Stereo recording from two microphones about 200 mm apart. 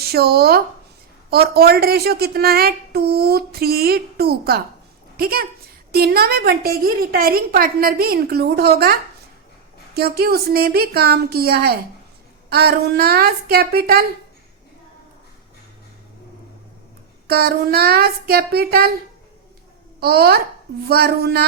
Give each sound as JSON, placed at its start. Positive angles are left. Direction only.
{"t": 0.0, "sound": "a woman's voice", "side_deg": -50}
{"t": 17.2, "sound": "a woman's voice", "side_deg": -50}
{"t": 20.0, "sound": "a woman's voice", "side_deg": -50}